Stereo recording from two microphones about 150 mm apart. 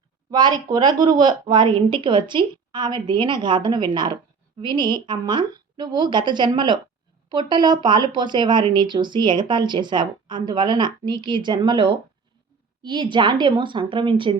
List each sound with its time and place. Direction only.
0.3 s speech: 25° right (ahead or behind)